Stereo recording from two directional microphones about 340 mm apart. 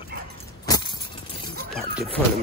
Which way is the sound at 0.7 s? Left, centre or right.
Centre.